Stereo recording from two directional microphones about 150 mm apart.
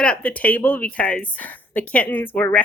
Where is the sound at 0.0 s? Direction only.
10° left (ahead or behind).